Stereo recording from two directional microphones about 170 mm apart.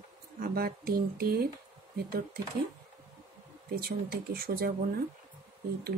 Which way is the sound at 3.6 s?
65° right (ahead or behind).